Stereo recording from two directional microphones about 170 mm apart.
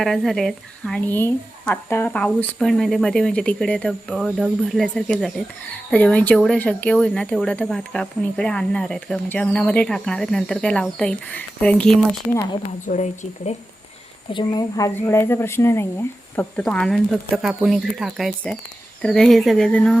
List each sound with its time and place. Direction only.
0.0 s speech: centre (ahead or behind)
12.9 s speech: 40° left (ahead or behind)
14.3 s speech: 20° left (ahead or behind); by 20.0 s 5° left (ahead or behind)